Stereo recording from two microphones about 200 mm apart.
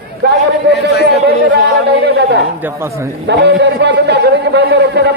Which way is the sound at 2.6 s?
10° right (ahead or behind).